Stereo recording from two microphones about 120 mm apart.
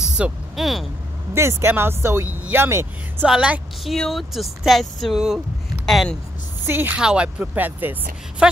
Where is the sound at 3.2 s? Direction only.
10° right (ahead or behind).